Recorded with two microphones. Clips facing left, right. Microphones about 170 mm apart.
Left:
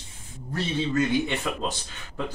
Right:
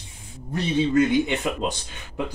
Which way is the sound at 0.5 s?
15° right (ahead or behind).